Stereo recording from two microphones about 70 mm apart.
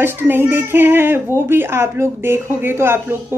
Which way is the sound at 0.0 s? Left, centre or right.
Right.